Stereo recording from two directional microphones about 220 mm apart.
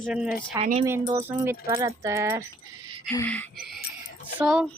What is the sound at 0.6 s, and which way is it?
Speech, 30° right (ahead or behind).